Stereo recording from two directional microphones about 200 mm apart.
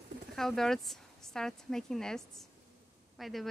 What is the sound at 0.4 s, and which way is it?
A woman's voice, centre (ahead or behind).